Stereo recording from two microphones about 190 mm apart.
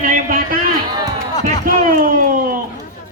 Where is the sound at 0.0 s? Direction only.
45° right (ahead or behind).